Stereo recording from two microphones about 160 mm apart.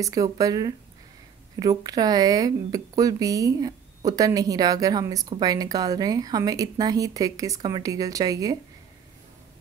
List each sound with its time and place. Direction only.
0.0 s speech: 20° right (ahead or behind)